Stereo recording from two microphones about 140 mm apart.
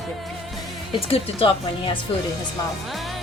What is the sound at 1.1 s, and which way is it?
Speech, 40° left (ahead or behind).